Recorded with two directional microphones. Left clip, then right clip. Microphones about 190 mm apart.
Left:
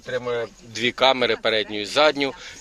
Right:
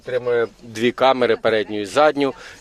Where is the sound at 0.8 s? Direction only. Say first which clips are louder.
Right 3 dB; 35° right (ahead or behind).